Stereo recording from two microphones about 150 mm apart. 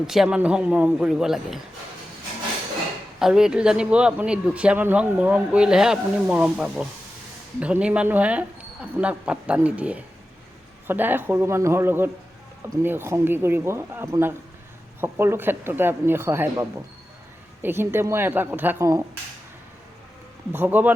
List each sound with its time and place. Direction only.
0.0 s speech: 5° right (ahead or behind)
3.2 s speech: 5° right (ahead or behind); by 19.0 s 20° right (ahead or behind)
20.5 s speech: 10° right (ahead or behind)